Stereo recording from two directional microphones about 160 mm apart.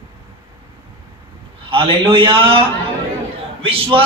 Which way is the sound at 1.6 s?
35° right (ahead or behind).